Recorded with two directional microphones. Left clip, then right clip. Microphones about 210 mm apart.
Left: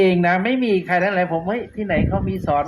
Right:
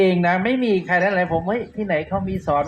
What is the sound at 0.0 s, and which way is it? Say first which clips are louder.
A man's voice: left 1 dB; 30° left (ahead or behind).